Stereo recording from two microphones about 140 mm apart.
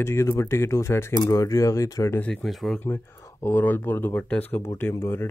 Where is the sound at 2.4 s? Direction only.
Centre (ahead or behind).